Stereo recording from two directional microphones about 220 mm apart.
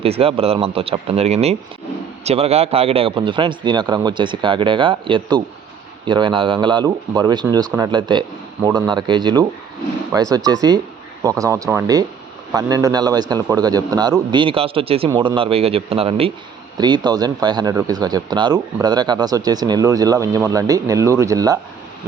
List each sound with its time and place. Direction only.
0.0 s a man's voice: 25° right (ahead or behind)